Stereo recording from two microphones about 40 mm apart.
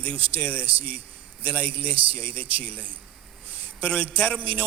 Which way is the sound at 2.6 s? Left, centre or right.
Left.